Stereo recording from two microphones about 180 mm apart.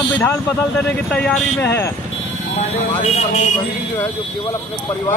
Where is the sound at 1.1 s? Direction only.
5° left (ahead or behind).